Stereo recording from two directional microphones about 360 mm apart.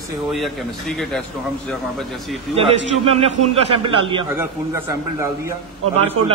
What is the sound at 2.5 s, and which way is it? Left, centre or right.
A man's voice, centre.